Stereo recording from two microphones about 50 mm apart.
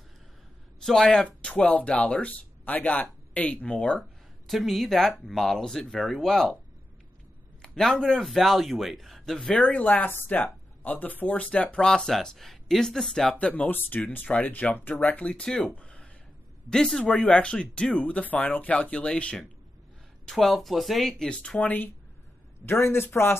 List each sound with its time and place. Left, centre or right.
0.8 s speech: centre
1.4 s speech: left
4.5 s a man's voice: centre
7.6 s a man's voice: centre
9.5 s speech: left
11.4 s speech: left
13.3 s speech: left
15.7 s a sound: left
16.7 s speech: centre
17.9 s speech: left
20.2 s a man's voice: centre
21.1 s speech: centre
21.5 s speech: left
22.7 s a man's voice: left